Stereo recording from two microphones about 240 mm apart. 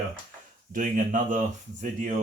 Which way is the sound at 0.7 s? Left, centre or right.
Right.